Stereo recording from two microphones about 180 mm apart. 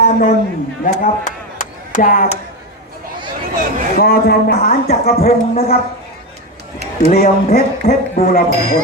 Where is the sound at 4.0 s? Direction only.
55° left (ahead or behind).